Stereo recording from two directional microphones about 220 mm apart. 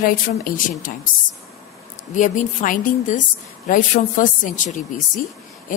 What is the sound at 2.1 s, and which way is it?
Speech, 35° left (ahead or behind).